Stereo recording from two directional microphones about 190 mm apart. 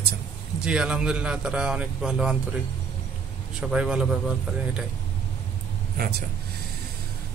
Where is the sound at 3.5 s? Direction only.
5° right (ahead or behind).